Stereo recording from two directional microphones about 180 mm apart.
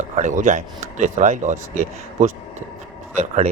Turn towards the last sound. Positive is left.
turn(degrees=-40)  # may be behind; listen again after turning